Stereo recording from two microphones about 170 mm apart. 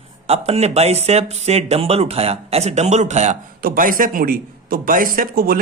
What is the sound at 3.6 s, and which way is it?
A man's voice, 55° right (ahead or behind).